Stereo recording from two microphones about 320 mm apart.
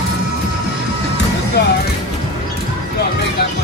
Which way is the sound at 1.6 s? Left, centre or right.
Left.